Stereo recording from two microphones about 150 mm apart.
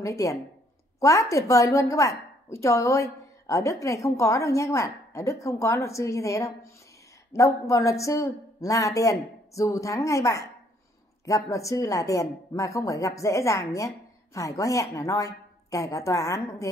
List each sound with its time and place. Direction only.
0.0 s a woman's voice: 20° left (ahead or behind)